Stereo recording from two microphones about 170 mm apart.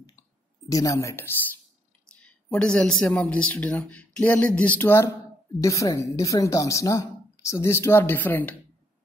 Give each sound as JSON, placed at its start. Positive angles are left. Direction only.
{"t": 0.7, "sound": "speech", "side_deg": 20}